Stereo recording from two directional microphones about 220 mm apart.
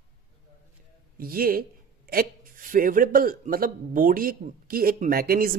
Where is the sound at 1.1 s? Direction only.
40° right (ahead or behind).